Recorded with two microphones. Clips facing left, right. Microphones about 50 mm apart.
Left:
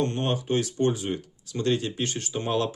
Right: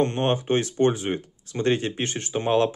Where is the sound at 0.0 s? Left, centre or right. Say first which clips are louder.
Right 4 dB; right.